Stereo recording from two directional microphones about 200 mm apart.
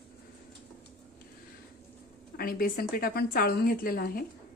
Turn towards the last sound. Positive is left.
turn(degrees=45)  # may be behind; listen again after turning